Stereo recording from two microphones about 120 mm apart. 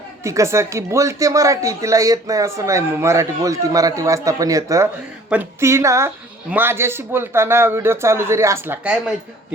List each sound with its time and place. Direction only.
0.2 s speech: 25° right (ahead or behind)